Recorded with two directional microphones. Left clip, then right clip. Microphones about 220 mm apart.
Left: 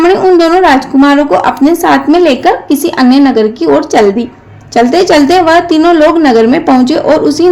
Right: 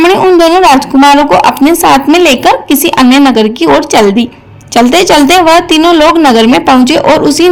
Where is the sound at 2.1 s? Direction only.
60° right (ahead or behind).